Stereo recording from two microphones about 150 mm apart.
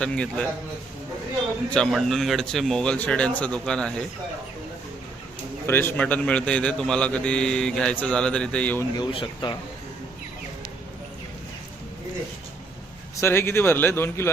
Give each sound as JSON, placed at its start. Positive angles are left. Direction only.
{"t": 0.0, "sound": "a man's voice", "side_deg": 5}
{"t": 1.7, "sound": "speech", "side_deg": 0}
{"t": 5.6, "sound": "a man's voice", "side_deg": 15}
{"t": 9.0, "sound": "speech", "side_deg": 30}
{"t": 13.1, "sound": "a man's voice", "side_deg": 15}